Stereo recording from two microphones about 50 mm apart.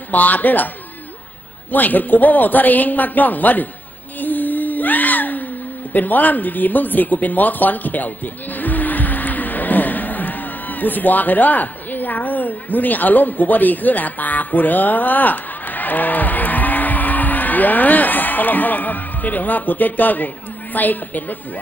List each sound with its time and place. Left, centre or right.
0.1 s speech: left
1.7 s speech: left
4.2 s a sound: left
5.9 s speech: left
8.5 s music: left
20.7 s speech: left